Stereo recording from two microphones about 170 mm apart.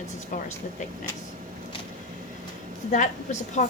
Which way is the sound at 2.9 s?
45° left (ahead or behind).